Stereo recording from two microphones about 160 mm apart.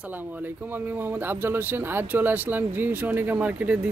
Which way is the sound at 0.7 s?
10° right (ahead or behind).